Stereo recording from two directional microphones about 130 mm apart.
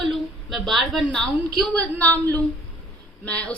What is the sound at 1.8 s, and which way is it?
Speech, 10° left (ahead or behind).